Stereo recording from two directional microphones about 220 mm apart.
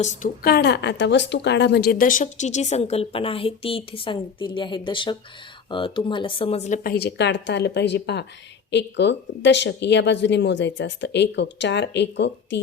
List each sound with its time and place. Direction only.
0.0 s a woman's voice: 35° left (ahead or behind)
6.9 s speech: 50° left (ahead or behind)